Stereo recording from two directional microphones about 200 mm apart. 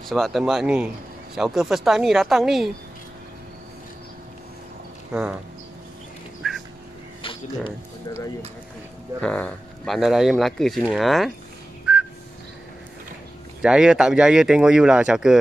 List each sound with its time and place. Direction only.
0.1 s speech: centre (ahead or behind)
5.1 s speech: 5° right (ahead or behind)
6.4 s a sound: centre (ahead or behind)
7.2 s a sound: 25° left (ahead or behind)
9.2 s speech: 5° left (ahead or behind)
11.9 s whistling: 5° right (ahead or behind)
13.6 s speech: 5° right (ahead or behind)